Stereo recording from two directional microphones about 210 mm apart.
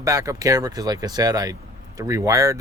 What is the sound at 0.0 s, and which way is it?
Speech, 15° right (ahead or behind).